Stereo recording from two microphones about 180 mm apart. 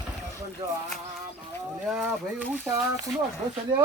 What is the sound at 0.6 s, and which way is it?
Speech, 20° right (ahead or behind).